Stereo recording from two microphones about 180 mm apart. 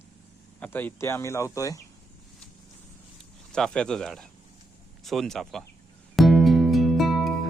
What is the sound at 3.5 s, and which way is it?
Speech, 5° left (ahead or behind).